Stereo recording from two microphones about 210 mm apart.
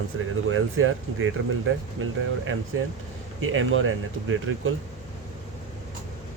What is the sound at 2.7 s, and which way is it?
Speech, 70° right (ahead or behind).